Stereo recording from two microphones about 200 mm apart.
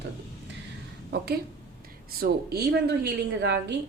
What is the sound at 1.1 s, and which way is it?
A woman's voice, 50° right (ahead or behind).